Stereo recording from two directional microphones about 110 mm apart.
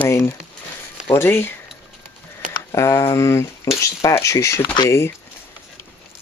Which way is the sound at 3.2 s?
25° left (ahead or behind).